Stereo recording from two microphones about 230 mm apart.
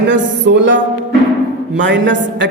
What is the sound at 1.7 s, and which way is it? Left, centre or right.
Speech, right.